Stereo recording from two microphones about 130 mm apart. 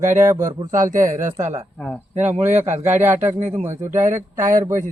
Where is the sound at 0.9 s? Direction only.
85° right.